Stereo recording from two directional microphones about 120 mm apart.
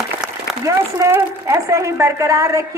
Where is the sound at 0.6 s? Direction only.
25° right (ahead or behind).